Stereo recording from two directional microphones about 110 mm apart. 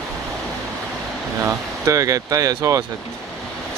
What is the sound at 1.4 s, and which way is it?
Speech, 30° right (ahead or behind).